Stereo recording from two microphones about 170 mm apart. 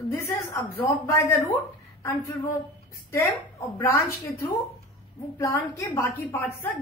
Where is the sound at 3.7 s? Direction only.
15° left (ahead or behind).